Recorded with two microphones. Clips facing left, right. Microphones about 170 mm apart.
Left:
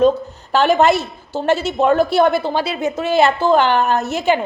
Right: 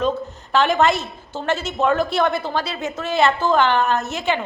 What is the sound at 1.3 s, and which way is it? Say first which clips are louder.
A woman's voice: left 6 dB; 35° left (ahead or behind).